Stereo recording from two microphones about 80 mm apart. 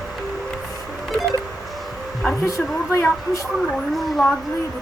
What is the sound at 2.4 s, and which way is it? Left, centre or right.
Speech, left.